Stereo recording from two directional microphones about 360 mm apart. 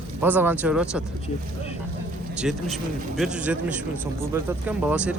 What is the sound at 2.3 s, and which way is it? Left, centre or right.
A man's voice, centre.